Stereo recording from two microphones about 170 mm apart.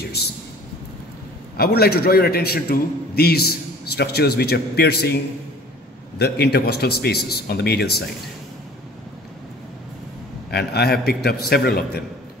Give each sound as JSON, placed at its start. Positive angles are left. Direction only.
{"t": 1.6, "sound": "a man's voice", "side_deg": 65}
{"t": 6.1, "sound": "a man's voice", "side_deg": 75}
{"t": 10.5, "sound": "a man's voice", "side_deg": 70}